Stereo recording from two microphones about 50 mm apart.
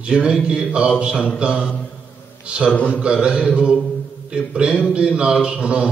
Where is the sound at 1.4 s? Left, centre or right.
Right.